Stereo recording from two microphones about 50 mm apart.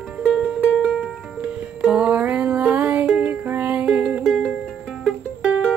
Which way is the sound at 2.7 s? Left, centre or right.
Right.